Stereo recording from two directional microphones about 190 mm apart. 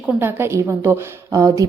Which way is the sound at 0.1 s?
10° right (ahead or behind).